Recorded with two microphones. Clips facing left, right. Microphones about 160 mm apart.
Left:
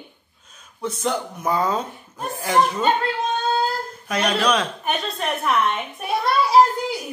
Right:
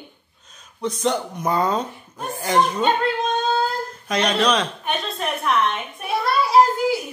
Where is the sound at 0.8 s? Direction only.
5° left (ahead or behind).